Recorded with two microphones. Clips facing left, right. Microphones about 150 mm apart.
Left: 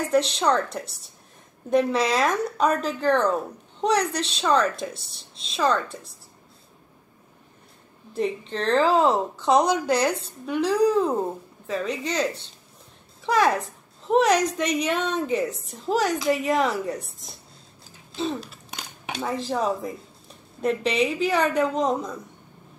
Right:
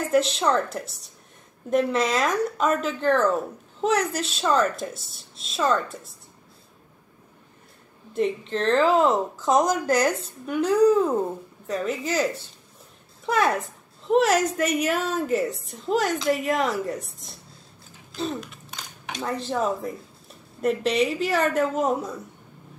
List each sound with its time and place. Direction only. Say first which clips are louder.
0.1 s a woman's voice: even; centre (ahead or behind)
8.2 s a woman's voice: right 2 dB; centre (ahead or behind)
10.6 s speech: right 3 dB; 30° left (ahead or behind)
11.6 s a woman's voice: even; centre (ahead or behind)
18.1 s a sound: left 1 dB; centre (ahead or behind)
19.2 s a woman's voice: even; centre (ahead or behind)